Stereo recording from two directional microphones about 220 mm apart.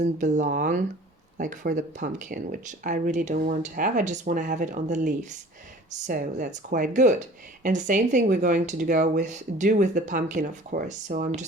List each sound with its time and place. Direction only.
0.0 s speech: 35° right (ahead or behind)